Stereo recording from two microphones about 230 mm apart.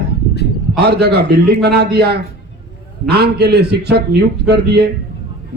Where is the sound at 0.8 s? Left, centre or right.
Right.